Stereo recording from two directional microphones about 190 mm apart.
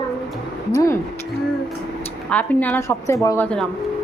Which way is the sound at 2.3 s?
5° left (ahead or behind).